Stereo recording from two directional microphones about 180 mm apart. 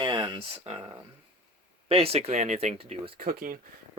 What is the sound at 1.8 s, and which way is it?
Speech, 35° right (ahead or behind).